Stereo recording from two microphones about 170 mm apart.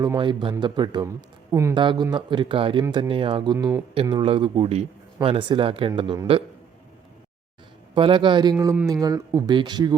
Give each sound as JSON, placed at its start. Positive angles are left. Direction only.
{"t": 0.0, "sound": "speech", "side_deg": -25}
{"t": 1.7, "sound": "speech", "side_deg": -30}
{"t": 4.0, "sound": "speech", "side_deg": -30}
{"t": 7.9, "sound": "speech", "side_deg": -30}